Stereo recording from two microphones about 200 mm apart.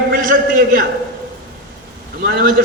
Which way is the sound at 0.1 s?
40° right (ahead or behind).